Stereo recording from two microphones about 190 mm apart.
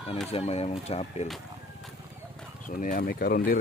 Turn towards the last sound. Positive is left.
turn(degrees=50)  # may be behind; listen again after turning